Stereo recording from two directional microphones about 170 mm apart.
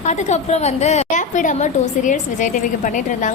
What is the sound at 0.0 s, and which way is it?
A woman's voice, 40° left (ahead or behind).